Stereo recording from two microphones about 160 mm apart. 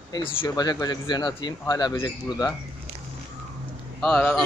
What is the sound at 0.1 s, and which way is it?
Speech, 35° left (ahead or behind).